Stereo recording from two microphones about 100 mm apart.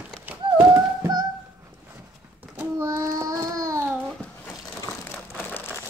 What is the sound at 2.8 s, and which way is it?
Child singing, 35° right (ahead or behind).